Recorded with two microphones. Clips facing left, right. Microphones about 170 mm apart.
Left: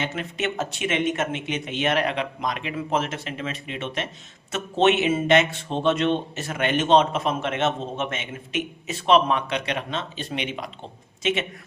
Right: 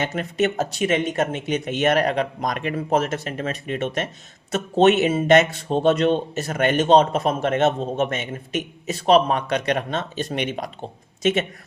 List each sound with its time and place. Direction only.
0.0 s speech: 40° right (ahead or behind)